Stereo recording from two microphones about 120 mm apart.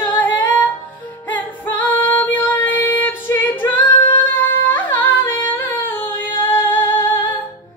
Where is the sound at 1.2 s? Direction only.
15° left (ahead or behind).